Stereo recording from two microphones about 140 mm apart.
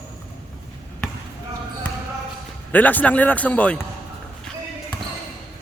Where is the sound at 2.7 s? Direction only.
10° left (ahead or behind).